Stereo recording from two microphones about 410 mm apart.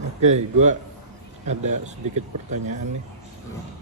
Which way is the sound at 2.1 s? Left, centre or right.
Centre.